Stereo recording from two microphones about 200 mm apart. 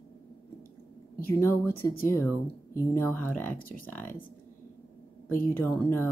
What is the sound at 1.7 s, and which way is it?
Speech, 50° left (ahead or behind).